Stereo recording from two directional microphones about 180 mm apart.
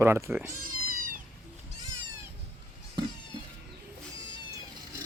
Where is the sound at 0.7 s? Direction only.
50° right (ahead or behind).